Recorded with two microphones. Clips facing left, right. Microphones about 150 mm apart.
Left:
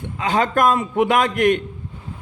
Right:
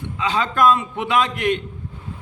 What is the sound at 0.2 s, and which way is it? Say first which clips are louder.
A man's voice: left 1 dB; 50° left (ahead or behind).